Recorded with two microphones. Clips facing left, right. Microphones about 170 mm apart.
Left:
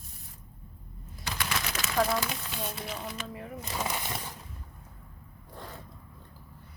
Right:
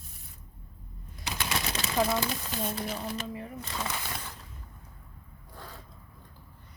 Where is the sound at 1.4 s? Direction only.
30° right (ahead or behind).